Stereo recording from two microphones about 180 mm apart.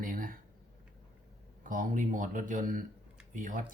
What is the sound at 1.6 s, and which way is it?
Speech, 50° right (ahead or behind).